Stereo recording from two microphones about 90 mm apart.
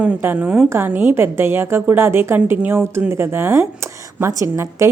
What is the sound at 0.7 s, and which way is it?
A woman's voice, 25° right (ahead or behind).